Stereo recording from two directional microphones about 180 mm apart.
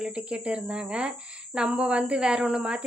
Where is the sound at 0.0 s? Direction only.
5° right (ahead or behind).